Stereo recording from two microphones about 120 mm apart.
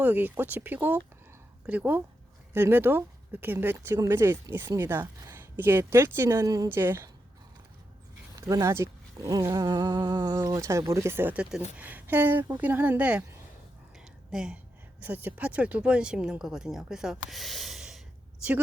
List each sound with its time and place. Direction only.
0.0 s speech: 15° right (ahead or behind)
6.7 s speech: 20° right (ahead or behind)
8.4 s speech: 25° right (ahead or behind); by 13.2 s 10° right (ahead or behind)
14.3 s speech: 5° right (ahead or behind)